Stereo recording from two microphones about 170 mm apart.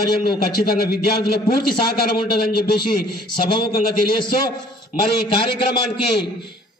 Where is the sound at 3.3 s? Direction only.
30° left (ahead or behind).